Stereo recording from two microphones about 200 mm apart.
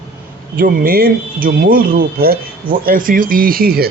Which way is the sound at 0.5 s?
45° right (ahead or behind).